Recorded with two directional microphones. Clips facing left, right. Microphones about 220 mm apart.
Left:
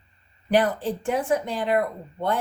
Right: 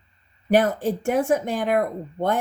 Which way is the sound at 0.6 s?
45° right (ahead or behind).